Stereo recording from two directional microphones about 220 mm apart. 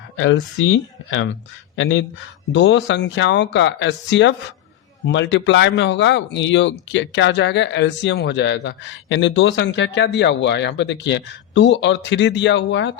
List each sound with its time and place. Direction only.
0.2 s speech: 60° left (ahead or behind)